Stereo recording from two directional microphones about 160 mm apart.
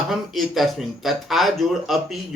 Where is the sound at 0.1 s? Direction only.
Centre (ahead or behind).